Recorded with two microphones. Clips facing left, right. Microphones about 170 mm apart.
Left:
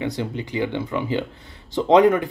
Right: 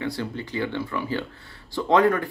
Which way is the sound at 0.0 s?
20° left (ahead or behind).